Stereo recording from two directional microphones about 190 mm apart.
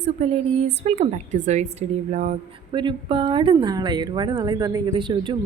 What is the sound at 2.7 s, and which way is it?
Speech, 25° right (ahead or behind).